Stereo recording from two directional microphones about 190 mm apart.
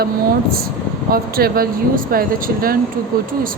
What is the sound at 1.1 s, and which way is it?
Speech, 50° right (ahead or behind).